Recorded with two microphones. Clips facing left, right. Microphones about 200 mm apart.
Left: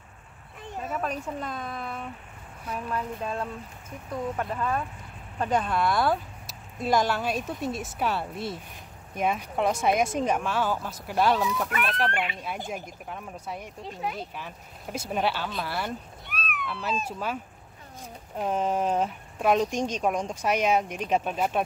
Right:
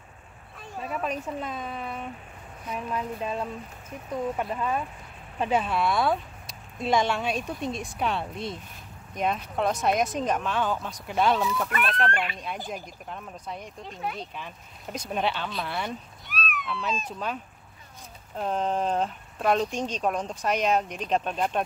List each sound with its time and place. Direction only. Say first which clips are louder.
0.8 s speech: right 1 dB; 10° right (ahead or behind)
13.1 s speech: left 1 dB; 10° left (ahead or behind)
16.3 s cat: right 2 dB; 60° left (ahead or behind)
17.0 s speech: left 1 dB; 5° left (ahead or behind)